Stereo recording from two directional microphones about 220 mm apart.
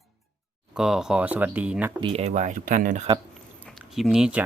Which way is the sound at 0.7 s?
Centre (ahead or behind).